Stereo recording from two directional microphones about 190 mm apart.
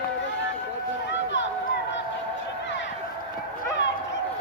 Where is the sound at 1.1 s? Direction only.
70° left (ahead or behind).